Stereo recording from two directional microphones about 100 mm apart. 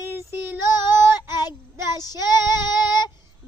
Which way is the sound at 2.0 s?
40° left (ahead or behind).